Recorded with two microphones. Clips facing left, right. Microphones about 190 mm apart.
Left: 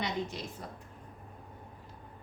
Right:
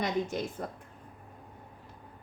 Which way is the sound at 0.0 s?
50° right (ahead or behind).